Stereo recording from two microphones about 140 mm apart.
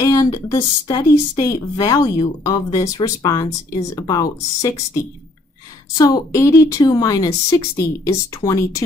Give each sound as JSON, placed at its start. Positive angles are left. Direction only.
{"t": 0.0, "sound": "a woman's voice", "side_deg": 25}